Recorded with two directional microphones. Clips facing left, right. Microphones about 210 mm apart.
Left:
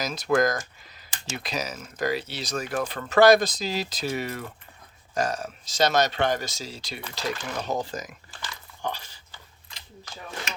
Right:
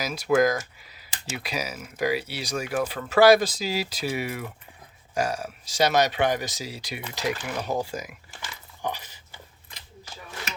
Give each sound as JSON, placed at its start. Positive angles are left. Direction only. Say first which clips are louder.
{"t": 0.0, "sound": "speech", "louder": "right 2 dB", "side_deg": -10}
{"t": 8.8, "sound": "dog", "louder": "right 1 dB", "side_deg": -15}